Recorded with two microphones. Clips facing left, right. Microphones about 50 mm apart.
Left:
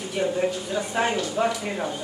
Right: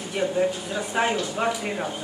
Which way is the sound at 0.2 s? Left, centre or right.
Centre.